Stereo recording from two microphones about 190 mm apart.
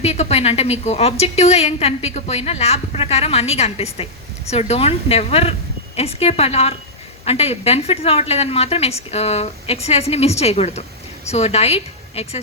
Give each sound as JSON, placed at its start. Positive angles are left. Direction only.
{"t": 0.0, "sound": "a woman's voice", "side_deg": 35}